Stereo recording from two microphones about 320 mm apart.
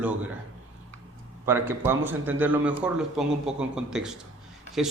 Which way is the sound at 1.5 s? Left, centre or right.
Centre.